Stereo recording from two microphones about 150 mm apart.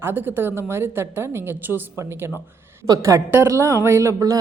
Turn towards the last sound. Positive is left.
turn(degrees=-20)  # may be behind; listen again after turning